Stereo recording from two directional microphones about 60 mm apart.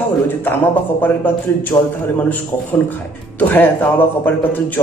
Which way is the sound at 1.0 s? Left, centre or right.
Left.